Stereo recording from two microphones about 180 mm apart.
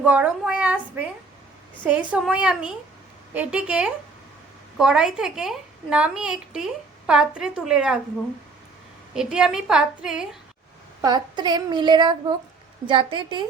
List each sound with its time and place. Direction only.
0.0 s a woman's voice: 10° right (ahead or behind)
9.1 s a woman's voice: 5° right (ahead or behind)
11.0 s a woman's voice: 25° right (ahead or behind)